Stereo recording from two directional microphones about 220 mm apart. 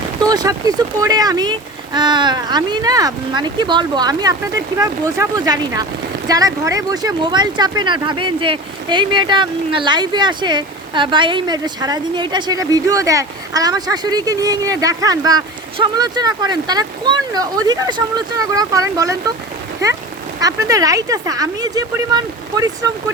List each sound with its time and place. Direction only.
0.2 s speech: 15° right (ahead or behind)
20.4 s speech: 15° right (ahead or behind)